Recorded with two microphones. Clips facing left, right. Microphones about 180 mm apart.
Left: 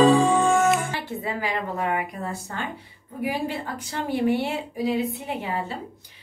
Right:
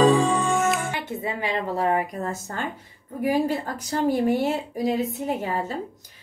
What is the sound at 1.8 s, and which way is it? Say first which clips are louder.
A woman's voice: right 3 dB; 40° right (ahead or behind).